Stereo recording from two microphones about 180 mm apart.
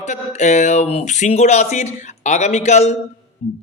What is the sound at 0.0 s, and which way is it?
Speech, 40° left (ahead or behind).